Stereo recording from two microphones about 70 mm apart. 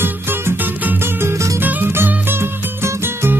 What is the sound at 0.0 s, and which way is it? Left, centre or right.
Music, right.